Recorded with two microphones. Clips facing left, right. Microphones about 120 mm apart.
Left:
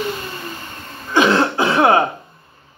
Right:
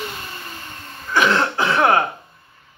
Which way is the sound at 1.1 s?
30° left (ahead or behind).